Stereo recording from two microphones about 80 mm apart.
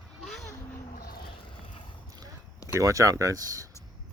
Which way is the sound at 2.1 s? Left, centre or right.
Right.